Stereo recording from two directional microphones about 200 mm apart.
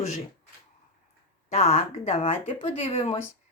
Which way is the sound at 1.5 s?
30° left (ahead or behind).